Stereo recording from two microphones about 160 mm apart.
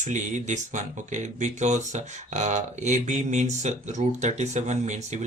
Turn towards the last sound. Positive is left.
turn(degrees=-45)  # may be behind; listen again after turning